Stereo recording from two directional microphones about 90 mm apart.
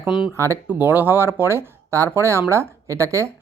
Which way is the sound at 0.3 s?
35° right (ahead or behind).